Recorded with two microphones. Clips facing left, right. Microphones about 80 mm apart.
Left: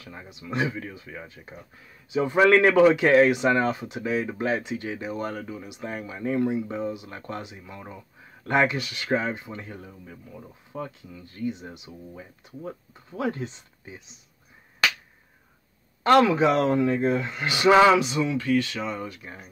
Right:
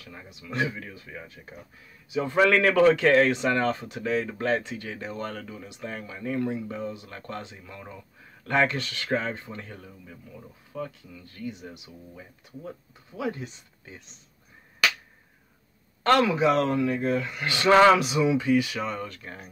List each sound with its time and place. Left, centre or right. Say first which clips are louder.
0.0 s a man's voice: left 3 dB; left
12.6 s speech: left 4 dB; left
13.8 s a man's voice: left 3 dB; centre
16.0 s speech: left 3 dB; centre
16.3 s speech: left 2 dB; left
16.5 s speech: left 2 dB; left
17.9 s speech: even; centre
18.3 s speech: right 1 dB; centre
18.8 s speech: even; centre
19.0 s a man's voice: left 1 dB; centre